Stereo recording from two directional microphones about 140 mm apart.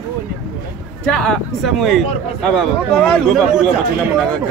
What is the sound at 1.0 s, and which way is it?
Speech, 5° left (ahead or behind).